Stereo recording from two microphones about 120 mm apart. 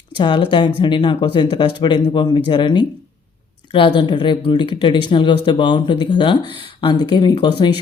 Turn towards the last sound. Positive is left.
turn(degrees=40)  # may be behind; listen again after turning